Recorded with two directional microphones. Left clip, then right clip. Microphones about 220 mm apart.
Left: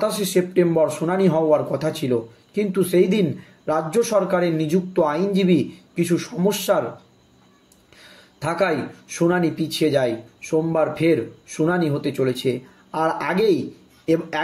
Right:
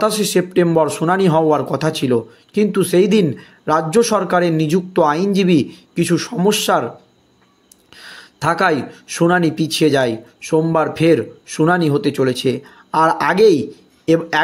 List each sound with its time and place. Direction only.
0.0 s speech: 40° right (ahead or behind)
7.9 s speech: 45° right (ahead or behind)